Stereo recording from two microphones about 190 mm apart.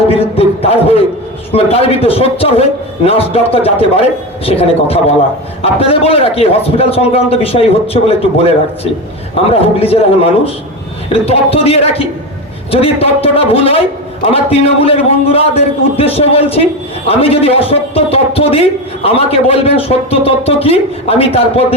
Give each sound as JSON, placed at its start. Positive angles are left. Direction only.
{"t": 0.1, "sound": "a man's voice", "side_deg": 30}